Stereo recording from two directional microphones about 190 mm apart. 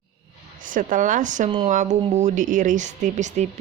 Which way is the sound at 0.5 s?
45° right (ahead or behind).